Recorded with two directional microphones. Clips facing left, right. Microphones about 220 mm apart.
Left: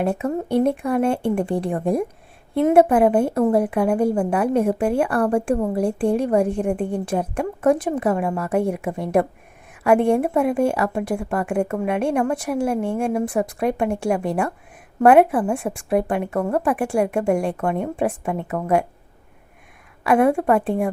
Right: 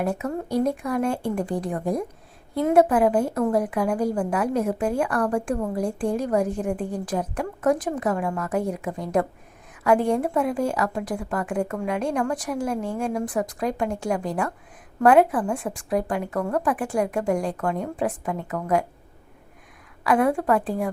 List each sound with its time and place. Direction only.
0.0 s a woman's voice: 25° left (ahead or behind)
20.1 s a woman's voice: 25° left (ahead or behind)